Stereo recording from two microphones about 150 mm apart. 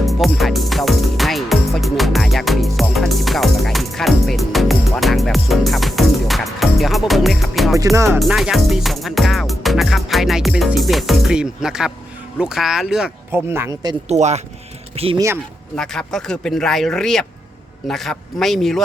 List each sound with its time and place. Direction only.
0.0 s music: centre (ahead or behind)
7.9 s speech: 20° right (ahead or behind)
8.2 s music: centre (ahead or behind)
12.4 s speech: 5° right (ahead or behind)
13.3 s speech: 15° right (ahead or behind)
14.1 s speech: 45° right (ahead or behind)
15.7 s speech: 5° left (ahead or behind)